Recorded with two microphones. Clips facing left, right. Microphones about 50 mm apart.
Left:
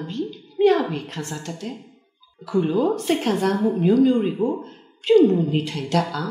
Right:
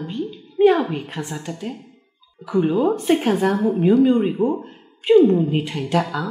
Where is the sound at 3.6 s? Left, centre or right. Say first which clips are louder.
Right 2 dB; right.